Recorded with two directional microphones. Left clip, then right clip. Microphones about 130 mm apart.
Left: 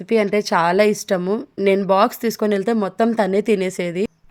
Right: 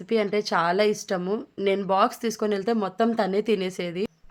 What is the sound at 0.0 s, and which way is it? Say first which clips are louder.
A woman's voice: left 6 dB; 40° left (ahead or behind).